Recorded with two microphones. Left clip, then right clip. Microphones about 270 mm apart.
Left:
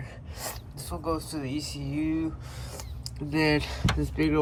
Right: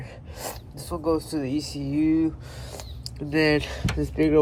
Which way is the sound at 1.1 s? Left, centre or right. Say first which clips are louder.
Right 6 dB; centre.